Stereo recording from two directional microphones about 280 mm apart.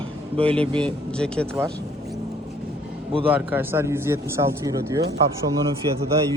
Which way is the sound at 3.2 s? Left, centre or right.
Centre.